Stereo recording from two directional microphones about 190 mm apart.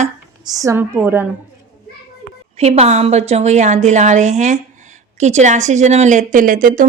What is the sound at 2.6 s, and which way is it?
A woman's voice, 35° right (ahead or behind).